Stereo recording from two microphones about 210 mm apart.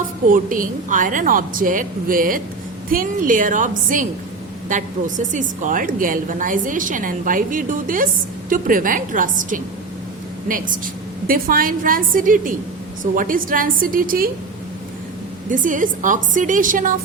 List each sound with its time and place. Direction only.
0.3 s a woman's voice: 40° right (ahead or behind)
11.3 s a woman's voice: 45° right (ahead or behind)
15.4 s a woman's voice: 40° right (ahead or behind)